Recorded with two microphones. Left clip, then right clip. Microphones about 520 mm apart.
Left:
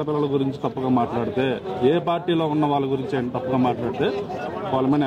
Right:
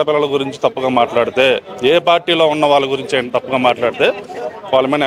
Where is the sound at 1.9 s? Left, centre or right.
Right.